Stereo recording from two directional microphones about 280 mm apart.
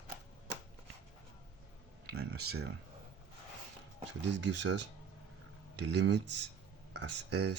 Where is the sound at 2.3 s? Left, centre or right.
Right.